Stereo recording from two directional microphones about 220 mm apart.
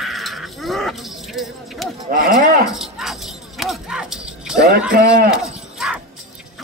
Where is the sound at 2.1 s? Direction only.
40° right (ahead or behind).